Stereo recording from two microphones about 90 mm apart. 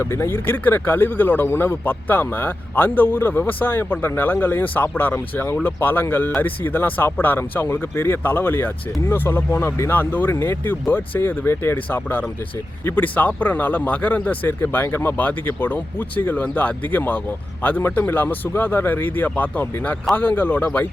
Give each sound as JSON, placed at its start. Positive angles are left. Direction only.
{"t": 0.0, "sound": "speech", "side_deg": 30}